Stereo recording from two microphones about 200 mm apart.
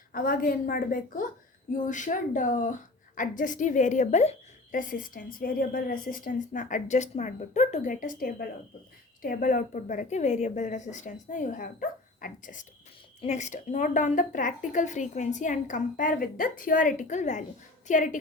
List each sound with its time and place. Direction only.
0.1 s a woman's voice: 45° left (ahead or behind)